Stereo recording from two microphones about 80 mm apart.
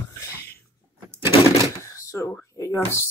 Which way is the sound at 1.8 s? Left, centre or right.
Left.